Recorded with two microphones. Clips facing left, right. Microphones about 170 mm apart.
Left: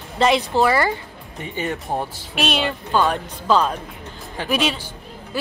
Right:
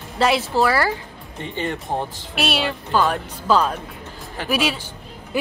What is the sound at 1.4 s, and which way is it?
Speech, 10° left (ahead or behind).